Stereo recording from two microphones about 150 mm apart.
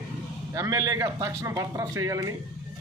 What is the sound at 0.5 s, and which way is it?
Speech, 20° right (ahead or behind).